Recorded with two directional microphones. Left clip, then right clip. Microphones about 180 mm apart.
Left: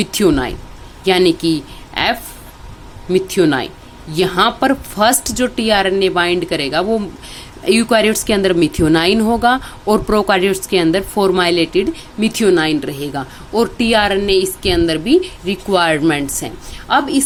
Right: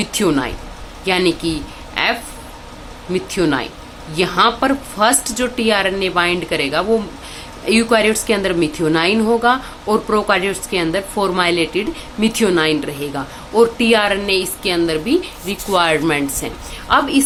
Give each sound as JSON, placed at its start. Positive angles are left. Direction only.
{"t": 0.0, "sound": "a woman's voice", "side_deg": 40}